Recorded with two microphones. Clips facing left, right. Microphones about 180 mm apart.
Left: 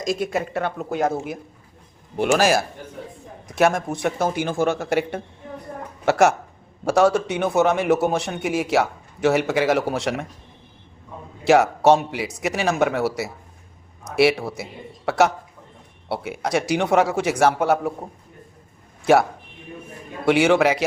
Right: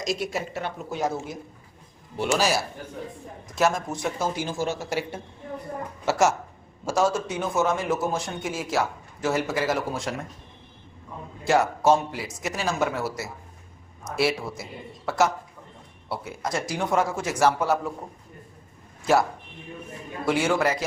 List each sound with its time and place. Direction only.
0.0 s a man's voice: 50° left (ahead or behind)
3.5 s a man's voice: 60° left (ahead or behind); by 10.2 s 75° left (ahead or behind)
11.4 s a man's voice: 75° left (ahead or behind)
20.2 s a man's voice: 75° left (ahead or behind)